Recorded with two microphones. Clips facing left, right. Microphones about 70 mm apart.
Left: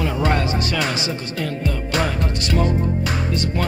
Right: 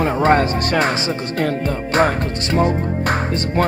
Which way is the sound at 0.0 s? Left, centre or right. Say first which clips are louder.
Right 6 dB; right.